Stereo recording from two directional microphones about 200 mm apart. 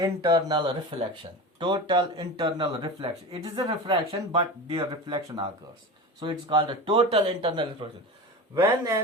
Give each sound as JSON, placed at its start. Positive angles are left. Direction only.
{"t": 0.0, "sound": "speech", "side_deg": -20}
{"t": 8.5, "sound": "speech", "side_deg": -15}